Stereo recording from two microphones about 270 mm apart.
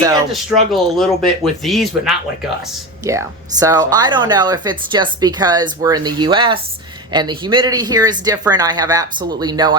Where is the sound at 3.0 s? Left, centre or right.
Centre.